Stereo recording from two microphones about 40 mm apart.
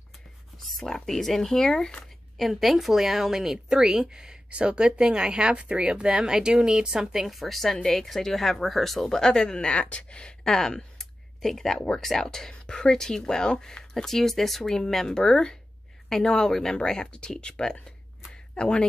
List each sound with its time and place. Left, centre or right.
0.7 s speech: centre
2.3 s a woman's voice: centre
7.2 s speech: centre
9.2 s speech: centre
10.4 s speech: centre
18.3 s a sound: left